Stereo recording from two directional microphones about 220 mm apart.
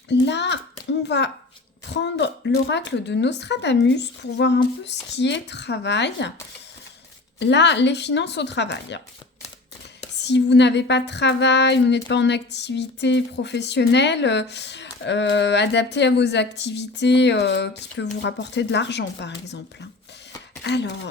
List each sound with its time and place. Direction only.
0.1 s speech: 50° left (ahead or behind)
7.3 s speech: 50° left (ahead or behind)
10.2 s speech: 50° left (ahead or behind)
20.7 s speech: 50° left (ahead or behind)